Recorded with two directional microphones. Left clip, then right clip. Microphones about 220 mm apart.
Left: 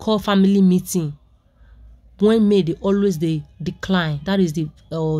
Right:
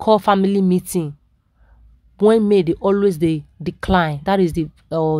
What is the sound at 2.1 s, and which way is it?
Speech, 30° right (ahead or behind).